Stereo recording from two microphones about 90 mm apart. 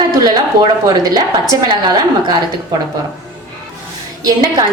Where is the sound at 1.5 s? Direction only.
40° right (ahead or behind).